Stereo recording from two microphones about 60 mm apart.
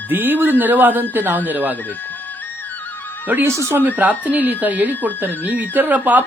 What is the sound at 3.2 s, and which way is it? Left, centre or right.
Speech, right.